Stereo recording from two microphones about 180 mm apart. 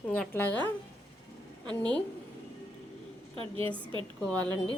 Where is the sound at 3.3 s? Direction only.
30° right (ahead or behind).